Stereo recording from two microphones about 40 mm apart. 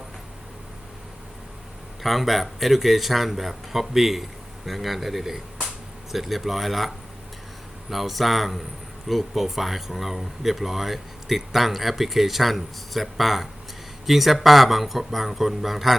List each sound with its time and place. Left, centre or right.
2.0 s speech: centre